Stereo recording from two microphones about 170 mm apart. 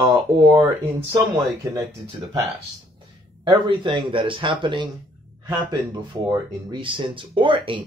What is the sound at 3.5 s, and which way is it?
Speech, 30° right (ahead or behind).